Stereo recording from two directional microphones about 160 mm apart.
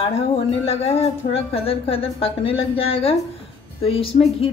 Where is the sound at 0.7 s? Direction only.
40° left (ahead or behind).